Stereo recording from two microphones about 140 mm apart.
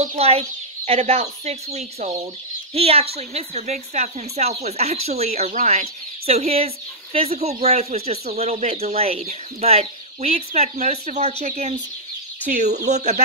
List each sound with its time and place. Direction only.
0.0 s a woman's voice: 50° right (ahead or behind)